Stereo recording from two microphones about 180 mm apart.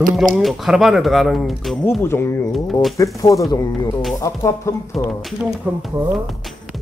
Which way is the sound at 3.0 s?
20° left (ahead or behind).